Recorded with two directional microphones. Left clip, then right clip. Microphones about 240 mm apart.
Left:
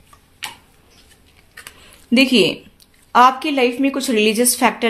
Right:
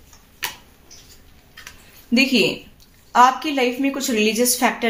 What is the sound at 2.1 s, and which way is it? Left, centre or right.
A woman's voice, left.